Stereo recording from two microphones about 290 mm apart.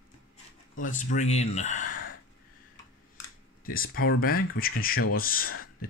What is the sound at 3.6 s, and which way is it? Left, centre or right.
Speech, left.